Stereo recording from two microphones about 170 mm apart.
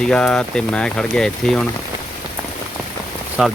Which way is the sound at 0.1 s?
5° left (ahead or behind).